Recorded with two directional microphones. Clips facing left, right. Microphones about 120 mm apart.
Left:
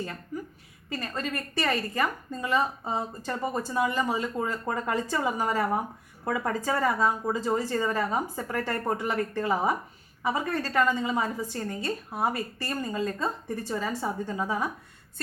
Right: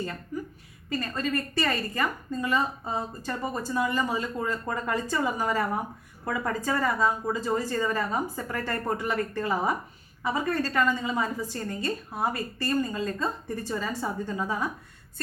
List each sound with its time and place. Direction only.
1.1 s a woman's voice: 20° left (ahead or behind)